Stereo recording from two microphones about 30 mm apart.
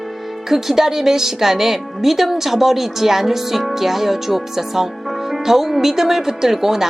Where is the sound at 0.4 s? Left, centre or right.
Centre.